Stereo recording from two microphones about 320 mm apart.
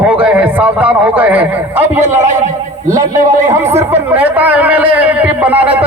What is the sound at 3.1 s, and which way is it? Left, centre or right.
Speech, right.